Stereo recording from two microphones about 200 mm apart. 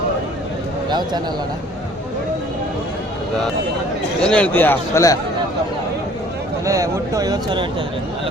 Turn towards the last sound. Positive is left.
turn(degrees=-20)  # may be behind; listen again after turning